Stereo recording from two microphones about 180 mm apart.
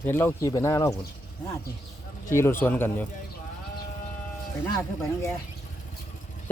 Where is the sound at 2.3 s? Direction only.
15° left (ahead or behind).